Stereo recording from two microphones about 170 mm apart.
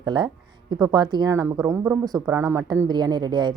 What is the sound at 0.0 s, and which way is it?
Speech, 25° right (ahead or behind).